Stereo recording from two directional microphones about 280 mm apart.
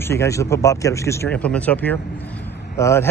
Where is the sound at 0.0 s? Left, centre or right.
Centre.